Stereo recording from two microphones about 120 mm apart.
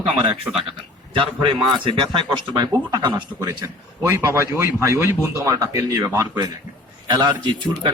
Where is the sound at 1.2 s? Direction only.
45° right (ahead or behind).